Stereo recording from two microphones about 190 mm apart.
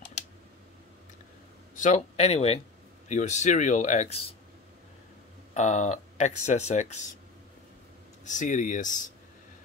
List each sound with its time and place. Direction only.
1.8 s speech: 35° left (ahead or behind)
5.5 s speech: 40° left (ahead or behind)
8.3 s speech: 40° left (ahead or behind)